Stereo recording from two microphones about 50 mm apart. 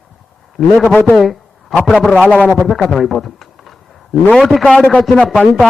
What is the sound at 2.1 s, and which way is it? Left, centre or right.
Speech, left.